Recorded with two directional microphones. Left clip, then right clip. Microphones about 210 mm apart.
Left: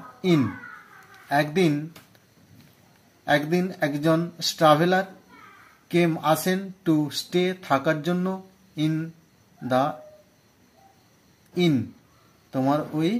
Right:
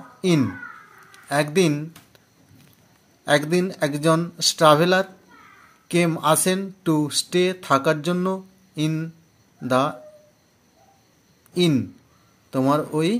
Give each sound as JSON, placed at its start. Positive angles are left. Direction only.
{"t": 0.2, "sound": "a child's voice", "side_deg": -35}
{"t": 3.3, "sound": "speech", "side_deg": -35}
{"t": 11.5, "sound": "speech", "side_deg": -35}